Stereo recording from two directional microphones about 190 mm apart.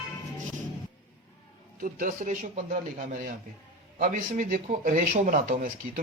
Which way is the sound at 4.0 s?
45° right (ahead or behind).